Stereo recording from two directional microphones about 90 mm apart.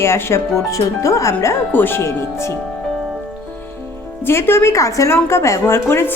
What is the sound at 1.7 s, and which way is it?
Speech, 25° left (ahead or behind).